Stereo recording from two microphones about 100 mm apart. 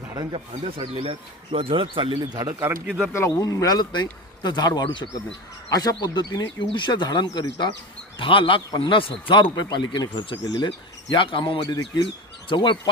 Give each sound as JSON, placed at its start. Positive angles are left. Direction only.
{"t": 0.3, "sound": "speech", "side_deg": -70}
{"t": 2.5, "sound": "speech", "side_deg": -20}
{"t": 3.1, "sound": "speech", "side_deg": 30}
{"t": 8.2, "sound": "speech", "side_deg": 60}
{"t": 9.3, "sound": "speech", "side_deg": 50}
{"t": 11.1, "sound": "speech", "side_deg": 55}
{"t": 11.7, "sound": "speech", "side_deg": 40}
{"t": 12.5, "sound": "speech", "side_deg": 55}